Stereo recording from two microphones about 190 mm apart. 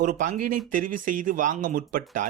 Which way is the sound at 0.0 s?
40° right (ahead or behind).